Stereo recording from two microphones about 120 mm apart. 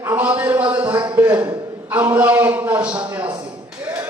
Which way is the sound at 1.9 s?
15° right (ahead or behind).